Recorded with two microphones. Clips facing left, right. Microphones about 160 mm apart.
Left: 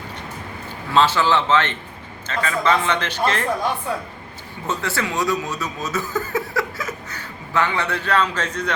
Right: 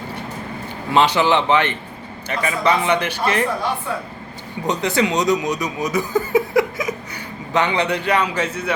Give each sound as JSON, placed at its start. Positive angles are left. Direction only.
{"t": 0.9, "sound": "a man's voice", "side_deg": -15}
{"t": 4.6, "sound": "speech", "side_deg": -20}